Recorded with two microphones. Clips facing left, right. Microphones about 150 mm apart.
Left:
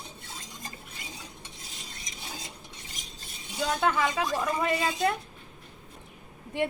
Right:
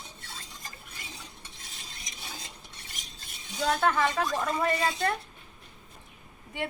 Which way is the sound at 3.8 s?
10° left (ahead or behind).